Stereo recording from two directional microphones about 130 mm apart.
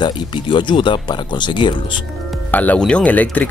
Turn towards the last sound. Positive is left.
turn(degrees=10)  # may be behind; listen again after turning